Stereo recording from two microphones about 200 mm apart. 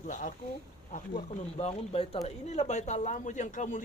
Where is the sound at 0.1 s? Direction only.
40° left (ahead or behind).